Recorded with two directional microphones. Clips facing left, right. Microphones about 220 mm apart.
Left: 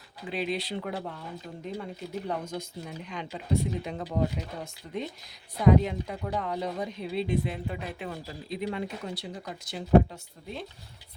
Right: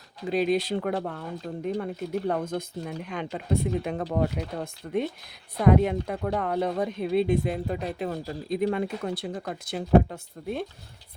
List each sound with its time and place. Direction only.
0.3 s speech: 45° right (ahead or behind)